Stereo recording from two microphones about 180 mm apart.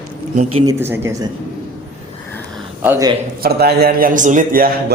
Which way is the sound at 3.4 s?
60° right (ahead or behind).